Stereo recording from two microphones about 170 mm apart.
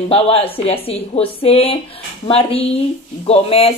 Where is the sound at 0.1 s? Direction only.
35° left (ahead or behind).